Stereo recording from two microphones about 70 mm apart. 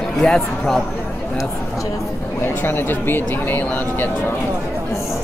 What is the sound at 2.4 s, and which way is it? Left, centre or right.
Speech, left.